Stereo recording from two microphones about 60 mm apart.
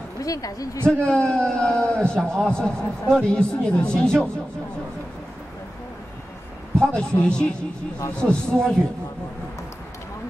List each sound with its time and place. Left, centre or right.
0.2 s a woman's voice: left
0.8 s a man's voice: centre
6.8 s a man's voice: centre